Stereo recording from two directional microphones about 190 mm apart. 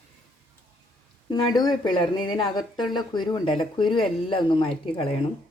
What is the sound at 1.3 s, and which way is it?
Speech, 20° left (ahead or behind).